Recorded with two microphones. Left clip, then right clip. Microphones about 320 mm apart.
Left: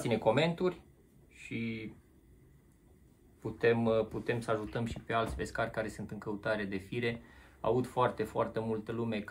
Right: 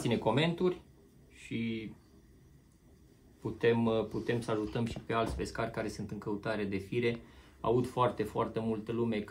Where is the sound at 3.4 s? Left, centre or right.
Centre.